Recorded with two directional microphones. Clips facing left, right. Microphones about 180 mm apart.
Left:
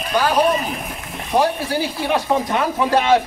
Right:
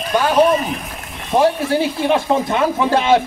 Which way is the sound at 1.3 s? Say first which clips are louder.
Right 3 dB; 25° right (ahead or behind).